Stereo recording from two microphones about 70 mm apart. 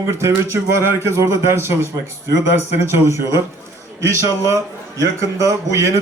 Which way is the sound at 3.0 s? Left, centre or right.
Right.